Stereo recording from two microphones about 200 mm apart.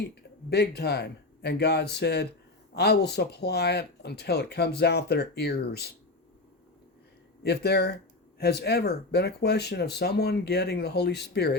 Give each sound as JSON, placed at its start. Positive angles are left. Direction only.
{"t": 0.0, "sound": "speech", "side_deg": 55}
{"t": 7.4, "sound": "speech", "side_deg": 55}